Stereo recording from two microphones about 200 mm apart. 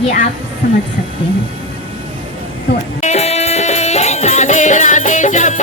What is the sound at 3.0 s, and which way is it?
Music, 35° left (ahead or behind).